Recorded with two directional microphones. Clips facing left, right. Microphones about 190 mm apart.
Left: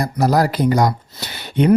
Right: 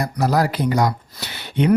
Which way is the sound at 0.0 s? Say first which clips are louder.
Left 3 dB; 40° left (ahead or behind).